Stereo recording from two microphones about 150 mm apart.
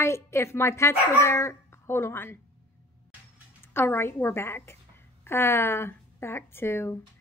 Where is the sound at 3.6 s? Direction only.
15° left (ahead or behind).